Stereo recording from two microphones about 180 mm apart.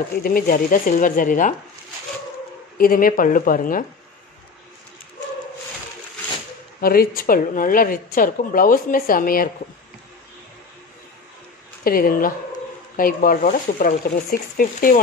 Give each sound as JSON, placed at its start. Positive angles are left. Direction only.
{"t": 0.1, "sound": "speech", "side_deg": 55}
{"t": 2.8, "sound": "speech", "side_deg": 50}
{"t": 6.8, "sound": "speech", "side_deg": 55}
{"t": 11.8, "sound": "speech", "side_deg": 55}